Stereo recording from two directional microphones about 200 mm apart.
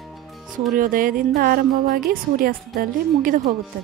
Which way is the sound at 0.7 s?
45° right (ahead or behind).